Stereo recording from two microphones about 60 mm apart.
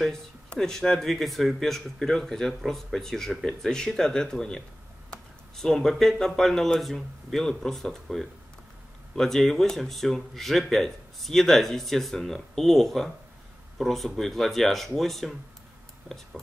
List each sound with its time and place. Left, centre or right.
0.0 s speech: centre